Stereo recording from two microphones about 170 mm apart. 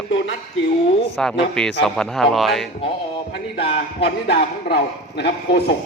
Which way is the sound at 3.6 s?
70° left (ahead or behind).